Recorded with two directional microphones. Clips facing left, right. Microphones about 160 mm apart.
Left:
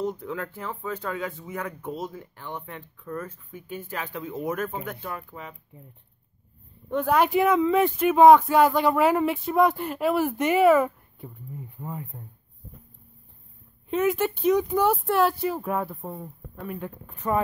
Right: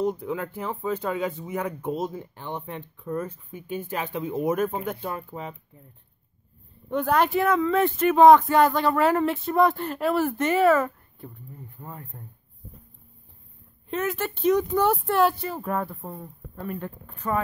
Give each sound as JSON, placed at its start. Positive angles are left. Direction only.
{"t": 0.0, "sound": "speech", "side_deg": -15}
{"t": 6.9, "sound": "speech", "side_deg": 5}
{"t": 7.2, "sound": "speech", "side_deg": 15}
{"t": 13.8, "sound": "speech", "side_deg": 10}